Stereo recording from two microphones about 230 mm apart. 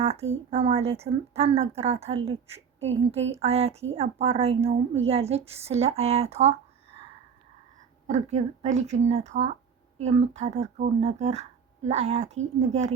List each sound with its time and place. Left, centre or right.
0.0 s a woman's voice: right
8.0 s a woman's voice: right